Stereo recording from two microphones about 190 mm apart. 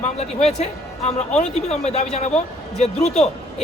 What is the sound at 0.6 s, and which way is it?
Speech, 35° left (ahead or behind).